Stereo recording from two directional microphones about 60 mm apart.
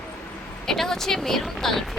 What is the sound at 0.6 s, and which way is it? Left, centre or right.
Speech, centre.